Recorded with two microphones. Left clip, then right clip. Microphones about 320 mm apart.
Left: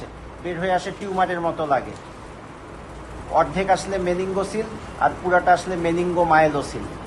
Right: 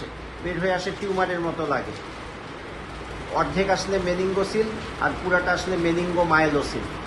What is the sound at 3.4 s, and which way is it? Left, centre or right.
Speech, left.